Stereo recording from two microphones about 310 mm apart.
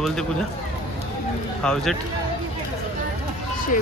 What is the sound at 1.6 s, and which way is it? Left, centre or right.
Speech, centre.